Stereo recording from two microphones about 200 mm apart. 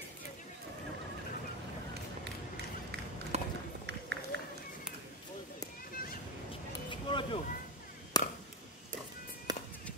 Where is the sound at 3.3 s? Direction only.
35° right (ahead or behind).